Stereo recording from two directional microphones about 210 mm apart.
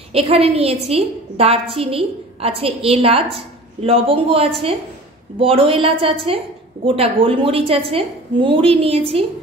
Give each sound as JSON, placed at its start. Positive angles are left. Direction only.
{"t": 0.1, "sound": "a woman's voice", "side_deg": -30}